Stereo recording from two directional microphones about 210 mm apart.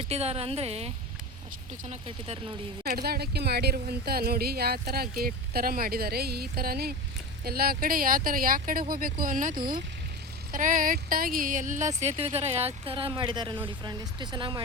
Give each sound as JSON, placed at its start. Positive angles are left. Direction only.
{"t": 0.0, "sound": "a woman's voice", "side_deg": -30}
{"t": 2.8, "sound": "a woman's voice", "side_deg": -45}